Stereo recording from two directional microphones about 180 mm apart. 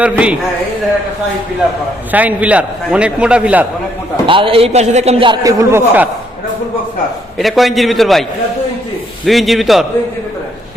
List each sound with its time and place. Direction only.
0.0 s a man's voice: 5° right (ahead or behind)
2.1 s a man's voice: 10° right (ahead or behind)
4.3 s a man's voice: 30° right (ahead or behind); by 6.1 s 10° right (ahead or behind)
7.3 s a man's voice: centre (ahead or behind)
9.2 s a man's voice: centre (ahead or behind)